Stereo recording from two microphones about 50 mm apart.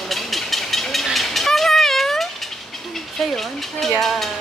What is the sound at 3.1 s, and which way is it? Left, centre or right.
Speech, centre.